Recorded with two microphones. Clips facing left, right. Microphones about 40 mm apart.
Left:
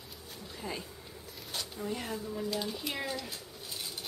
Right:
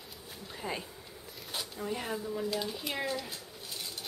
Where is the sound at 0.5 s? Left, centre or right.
Centre.